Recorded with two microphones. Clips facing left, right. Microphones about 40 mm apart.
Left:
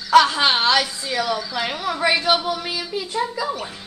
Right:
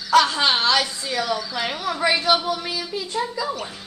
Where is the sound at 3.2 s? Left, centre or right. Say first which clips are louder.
Left 2 dB; centre.